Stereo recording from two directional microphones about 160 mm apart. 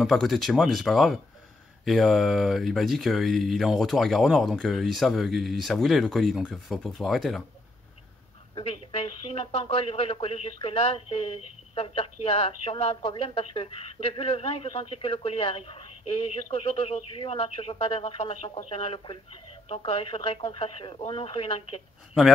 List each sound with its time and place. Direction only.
0.0 s speech: centre (ahead or behind)
8.5 s speech: 40° left (ahead or behind)